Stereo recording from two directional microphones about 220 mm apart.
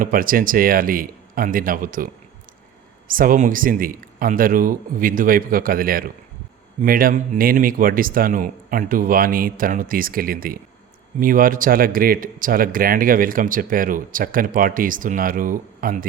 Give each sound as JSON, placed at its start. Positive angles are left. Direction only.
{"t": 0.0, "sound": "speech", "side_deg": -40}
{"t": 3.1, "sound": "speech", "side_deg": -40}